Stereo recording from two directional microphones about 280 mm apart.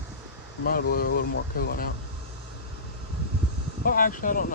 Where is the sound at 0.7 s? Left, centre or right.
Left.